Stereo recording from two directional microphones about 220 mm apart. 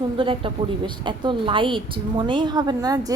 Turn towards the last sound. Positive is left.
turn(degrees=-15)  # may be behind; listen again after turning